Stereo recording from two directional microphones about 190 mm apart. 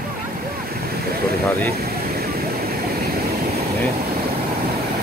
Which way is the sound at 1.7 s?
55° right (ahead or behind).